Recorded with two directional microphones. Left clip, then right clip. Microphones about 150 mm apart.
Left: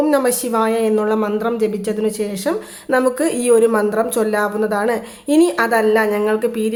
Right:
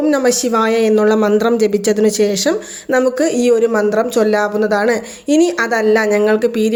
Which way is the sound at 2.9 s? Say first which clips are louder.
Right 2 dB; 15° right (ahead or behind).